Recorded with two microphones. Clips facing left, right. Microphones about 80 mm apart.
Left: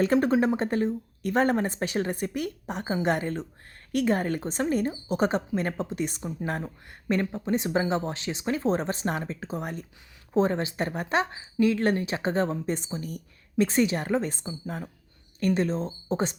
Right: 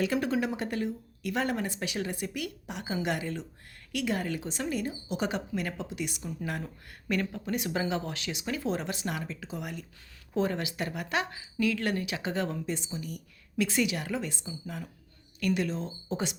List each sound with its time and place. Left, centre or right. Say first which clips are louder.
0.0 s speech: left 6 dB; left